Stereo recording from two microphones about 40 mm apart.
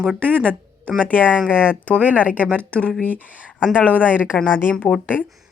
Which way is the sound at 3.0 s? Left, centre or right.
Left.